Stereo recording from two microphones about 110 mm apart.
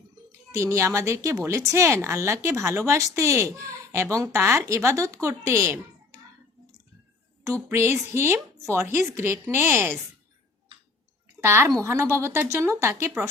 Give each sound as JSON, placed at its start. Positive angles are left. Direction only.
{"t": 0.3, "sound": "speech", "side_deg": -25}
{"t": 7.4, "sound": "speech", "side_deg": -25}
{"t": 11.3, "sound": "speech", "side_deg": -20}